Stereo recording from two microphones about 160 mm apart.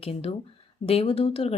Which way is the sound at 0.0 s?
40° left (ahead or behind).